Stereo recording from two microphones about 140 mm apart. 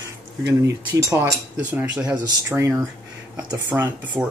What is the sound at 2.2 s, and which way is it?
Speech, 20° right (ahead or behind).